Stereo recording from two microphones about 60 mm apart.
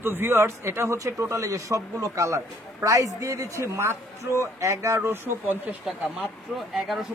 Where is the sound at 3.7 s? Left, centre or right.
Right.